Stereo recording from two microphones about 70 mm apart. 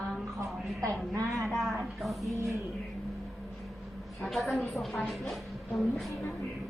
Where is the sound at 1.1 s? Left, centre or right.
Right.